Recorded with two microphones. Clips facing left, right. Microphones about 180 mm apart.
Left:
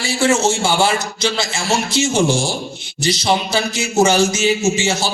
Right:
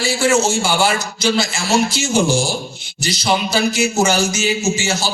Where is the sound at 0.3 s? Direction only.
25° left (ahead or behind).